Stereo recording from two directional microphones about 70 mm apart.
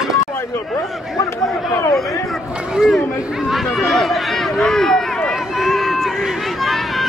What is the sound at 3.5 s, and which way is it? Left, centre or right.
Run, centre.